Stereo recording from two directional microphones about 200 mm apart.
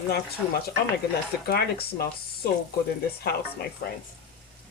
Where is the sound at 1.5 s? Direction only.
50° left (ahead or behind).